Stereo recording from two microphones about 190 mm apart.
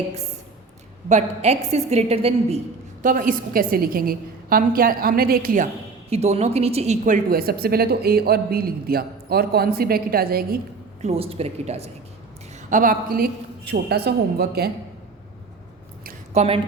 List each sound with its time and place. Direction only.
1.0 s a woman's voice: 35° right (ahead or behind)
3.0 s a woman's voice: 45° right (ahead or behind)
6.1 s a woman's voice: 35° right (ahead or behind); by 10.6 s 50° right (ahead or behind)
11.0 s a woman's voice: 30° right (ahead or behind)
12.7 s a woman's voice: 45° right (ahead or behind)
16.3 s a woman's voice: 35° right (ahead or behind)